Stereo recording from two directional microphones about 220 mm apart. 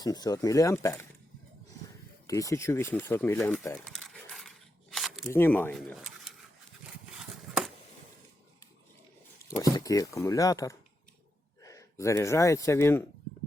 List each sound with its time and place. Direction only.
0.0 s speech: 15° left (ahead or behind)
2.2 s speech: 15° left (ahead or behind)
3.8 s crumpling: centre (ahead or behind)
5.3 s speech: 10° left (ahead or behind)
7.2 s a sound: centre (ahead or behind)
9.6 s speech: 15° left (ahead or behind)